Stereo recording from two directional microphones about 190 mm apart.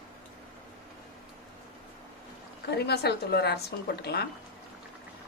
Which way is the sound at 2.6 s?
60° left (ahead or behind).